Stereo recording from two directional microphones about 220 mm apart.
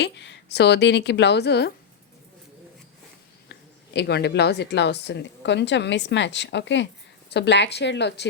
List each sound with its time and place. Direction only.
0.0 s a woman's voice: 50° left (ahead or behind)
3.9 s a woman's voice: 50° left (ahead or behind)